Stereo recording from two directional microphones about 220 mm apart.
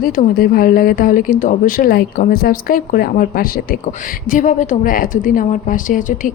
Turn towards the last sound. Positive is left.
turn(degrees=35)  # may be behind; listen again after turning